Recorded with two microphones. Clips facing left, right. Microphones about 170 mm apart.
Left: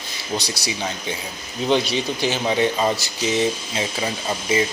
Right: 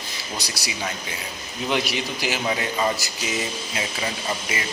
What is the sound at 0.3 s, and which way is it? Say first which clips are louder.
Speech: left 7 dB; 25° left (ahead or behind).